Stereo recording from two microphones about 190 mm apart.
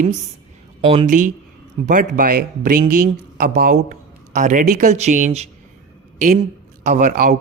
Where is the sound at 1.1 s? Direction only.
45° right (ahead or behind).